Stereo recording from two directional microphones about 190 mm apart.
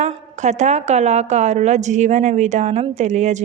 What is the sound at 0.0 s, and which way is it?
A woman's voice, 40° right (ahead or behind).